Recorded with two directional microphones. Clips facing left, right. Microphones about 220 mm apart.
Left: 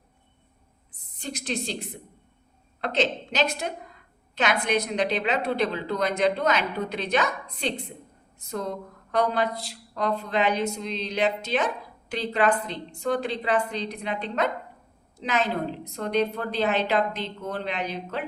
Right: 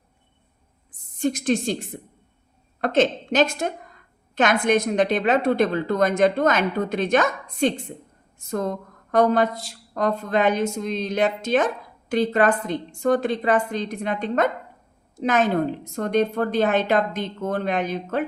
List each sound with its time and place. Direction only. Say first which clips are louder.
0.9 s a woman's voice: right 13 dB; 45° right (ahead or behind)